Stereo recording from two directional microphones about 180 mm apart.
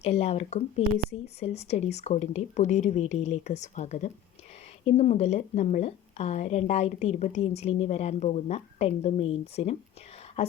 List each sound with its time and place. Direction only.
0.0 s a woman's voice: 35° left (ahead or behind)